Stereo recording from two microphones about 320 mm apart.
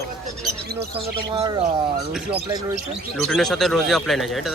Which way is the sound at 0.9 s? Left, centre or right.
Centre.